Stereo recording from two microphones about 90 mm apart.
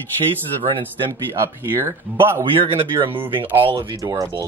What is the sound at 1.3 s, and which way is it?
Speech, 30° right (ahead or behind).